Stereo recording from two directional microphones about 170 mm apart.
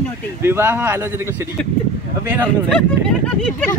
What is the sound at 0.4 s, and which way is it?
Speech, 15° right (ahead or behind).